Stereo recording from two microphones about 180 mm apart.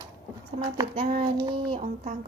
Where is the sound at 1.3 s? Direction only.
25° right (ahead or behind).